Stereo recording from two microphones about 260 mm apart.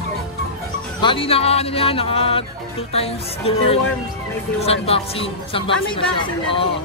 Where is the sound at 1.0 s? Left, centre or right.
Centre.